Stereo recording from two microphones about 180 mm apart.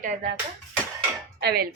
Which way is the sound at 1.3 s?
60° right (ahead or behind).